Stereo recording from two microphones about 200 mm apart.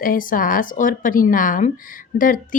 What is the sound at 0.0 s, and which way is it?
Speech, 45° left (ahead or behind).